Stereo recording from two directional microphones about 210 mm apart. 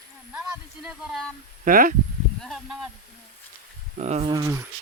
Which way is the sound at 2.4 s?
Centre (ahead or behind).